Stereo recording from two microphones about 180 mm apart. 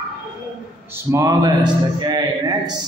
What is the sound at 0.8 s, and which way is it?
A man's voice, 15° right (ahead or behind).